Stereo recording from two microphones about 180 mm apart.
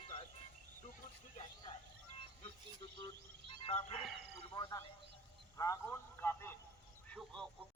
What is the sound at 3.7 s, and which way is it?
Speech, 40° left (ahead or behind).